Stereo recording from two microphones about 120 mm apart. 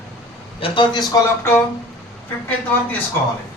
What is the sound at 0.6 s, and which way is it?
Speech, 40° left (ahead or behind).